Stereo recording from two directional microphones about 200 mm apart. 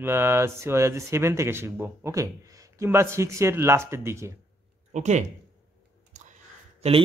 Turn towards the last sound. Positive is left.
turn(degrees=-30)  # may be behind; listen again after turning